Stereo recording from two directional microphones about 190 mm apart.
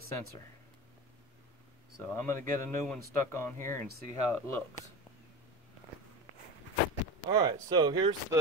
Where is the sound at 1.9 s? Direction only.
15° left (ahead or behind).